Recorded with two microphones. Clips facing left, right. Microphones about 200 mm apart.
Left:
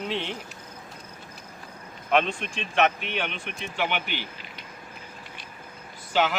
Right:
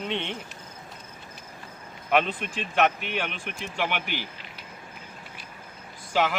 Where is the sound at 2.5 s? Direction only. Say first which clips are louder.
Even; centre (ahead or behind).